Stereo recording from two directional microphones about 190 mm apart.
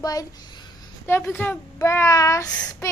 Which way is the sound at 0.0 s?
20° left (ahead or behind).